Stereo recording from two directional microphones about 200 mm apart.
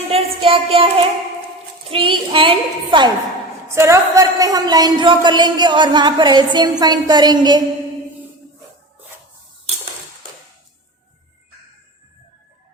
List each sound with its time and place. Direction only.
0.1 s speech: 25° right (ahead or behind)
1.9 s speech: 25° right (ahead or behind)
3.7 s speech: 15° right (ahead or behind)